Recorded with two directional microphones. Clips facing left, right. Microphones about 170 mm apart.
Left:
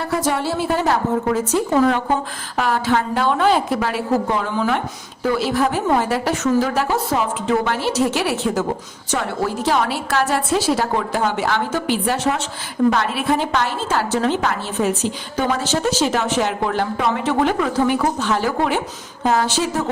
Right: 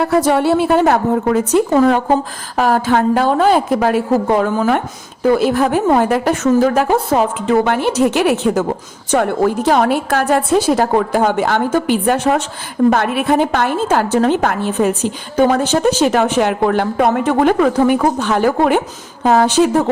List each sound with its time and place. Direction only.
0.0 s a woman's voice: 60° right (ahead or behind)